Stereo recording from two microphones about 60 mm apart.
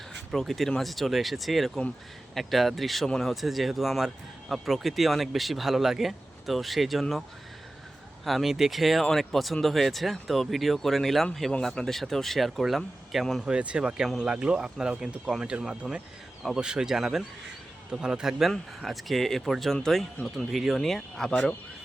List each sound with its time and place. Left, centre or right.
0.1 s a sound: centre
0.8 s speech: centre
8.2 s speech: centre
13.4 s speech: centre